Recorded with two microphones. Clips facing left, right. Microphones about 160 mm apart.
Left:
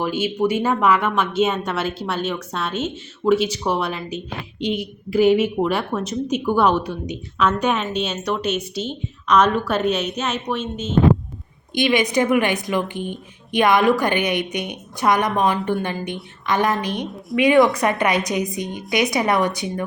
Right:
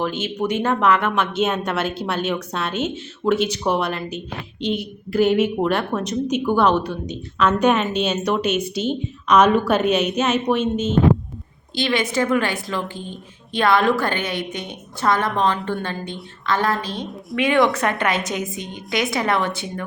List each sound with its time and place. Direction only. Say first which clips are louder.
0.0 s a woman's voice: left 3 dB; 10° left (ahead or behind)
11.7 s a woman's voice: left 3 dB; 15° left (ahead or behind)
17.5 s a woman's voice: left 3 dB; centre (ahead or behind)
17.7 s a woman's voice: left 2 dB; 15° left (ahead or behind)